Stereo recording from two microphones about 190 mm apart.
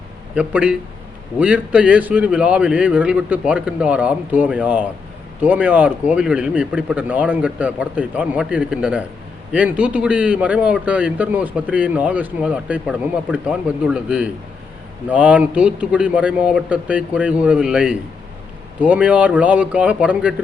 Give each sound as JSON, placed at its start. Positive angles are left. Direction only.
{"t": 0.3, "sound": "a man's voice", "side_deg": -5}